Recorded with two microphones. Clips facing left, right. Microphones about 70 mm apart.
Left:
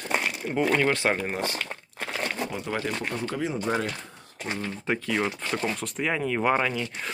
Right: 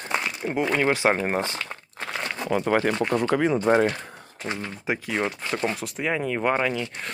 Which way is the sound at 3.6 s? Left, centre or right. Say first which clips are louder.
Right 7 dB; right.